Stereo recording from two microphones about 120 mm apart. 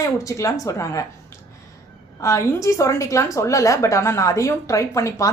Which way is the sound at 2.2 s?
25° left (ahead or behind).